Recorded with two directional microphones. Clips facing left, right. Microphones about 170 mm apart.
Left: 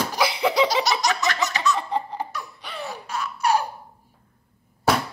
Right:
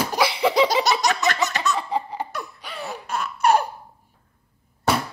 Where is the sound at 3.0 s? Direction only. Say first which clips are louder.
Right 4 dB; 55° right (ahead or behind).